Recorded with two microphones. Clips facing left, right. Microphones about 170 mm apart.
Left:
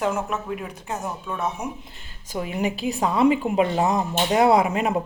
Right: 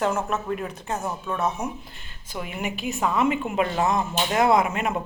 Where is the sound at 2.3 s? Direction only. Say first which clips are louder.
Left 5 dB; 30° left (ahead or behind).